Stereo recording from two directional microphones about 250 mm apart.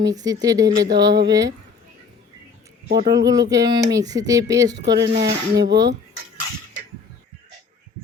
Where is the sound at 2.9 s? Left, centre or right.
Centre.